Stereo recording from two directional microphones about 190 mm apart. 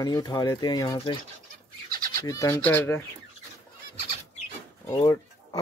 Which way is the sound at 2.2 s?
15° left (ahead or behind).